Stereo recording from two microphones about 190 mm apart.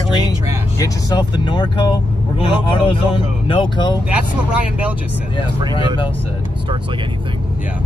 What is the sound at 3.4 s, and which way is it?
Speech, 25° left (ahead or behind).